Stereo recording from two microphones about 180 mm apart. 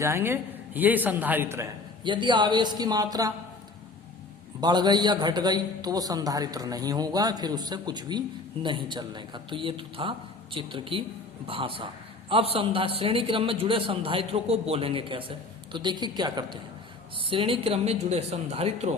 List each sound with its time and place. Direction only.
0.0 s a man's voice: 15° right (ahead or behind)
2.0 s a man's voice: 25° right (ahead or behind)
4.6 s a man's voice: 25° right (ahead or behind)